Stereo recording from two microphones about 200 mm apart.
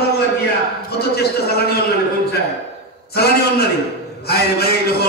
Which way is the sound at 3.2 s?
50° left (ahead or behind).